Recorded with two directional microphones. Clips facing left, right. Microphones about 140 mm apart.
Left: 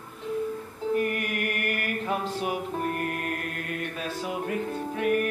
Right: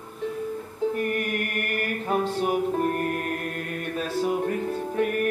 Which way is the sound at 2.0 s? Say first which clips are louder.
Right 5 dB; 40° right (ahead or behind).